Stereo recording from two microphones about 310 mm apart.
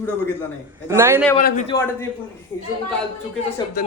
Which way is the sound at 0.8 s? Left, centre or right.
Centre.